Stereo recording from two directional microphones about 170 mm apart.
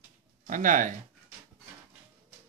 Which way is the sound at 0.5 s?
50° right (ahead or behind).